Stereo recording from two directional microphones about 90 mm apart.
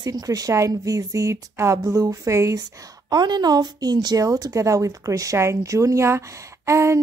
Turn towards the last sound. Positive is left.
turn(degrees=-35)  # may be behind; listen again after turning